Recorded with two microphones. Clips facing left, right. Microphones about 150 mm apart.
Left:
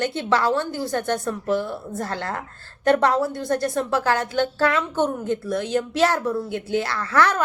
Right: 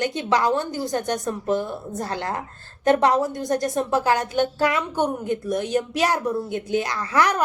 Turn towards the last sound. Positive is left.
turn(degrees=-15)  # may be behind; listen again after turning